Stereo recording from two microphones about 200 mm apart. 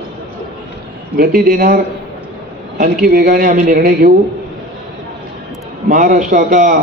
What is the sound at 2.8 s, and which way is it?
A man's voice, 45° right (ahead or behind).